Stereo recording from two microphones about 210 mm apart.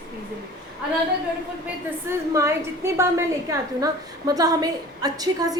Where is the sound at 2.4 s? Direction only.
15° right (ahead or behind).